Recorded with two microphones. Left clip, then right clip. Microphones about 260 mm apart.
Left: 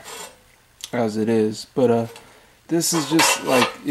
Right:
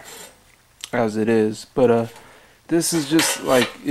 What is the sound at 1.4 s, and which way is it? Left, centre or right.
Speech, centre.